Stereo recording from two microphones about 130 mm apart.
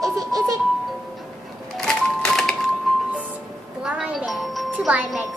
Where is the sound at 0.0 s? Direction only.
30° right (ahead or behind).